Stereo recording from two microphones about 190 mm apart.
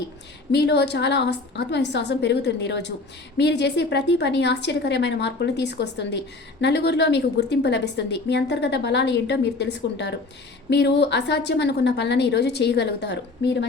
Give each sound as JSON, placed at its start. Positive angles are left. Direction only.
{"t": 0.5, "sound": "a woman's voice", "side_deg": 65}